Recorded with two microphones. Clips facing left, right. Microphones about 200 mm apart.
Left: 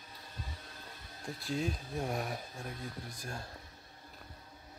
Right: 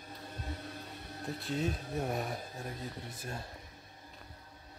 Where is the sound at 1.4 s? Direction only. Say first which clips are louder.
Even; centre (ahead or behind).